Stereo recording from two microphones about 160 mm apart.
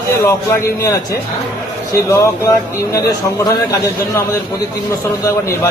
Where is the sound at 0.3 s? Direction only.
15° left (ahead or behind).